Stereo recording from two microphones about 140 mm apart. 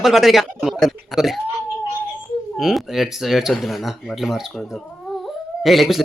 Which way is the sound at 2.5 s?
Centre (ahead or behind).